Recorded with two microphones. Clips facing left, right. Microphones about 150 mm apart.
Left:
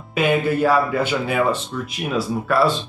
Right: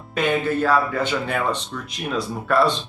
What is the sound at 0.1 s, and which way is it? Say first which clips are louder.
Speech: left 2 dB; 10° left (ahead or behind).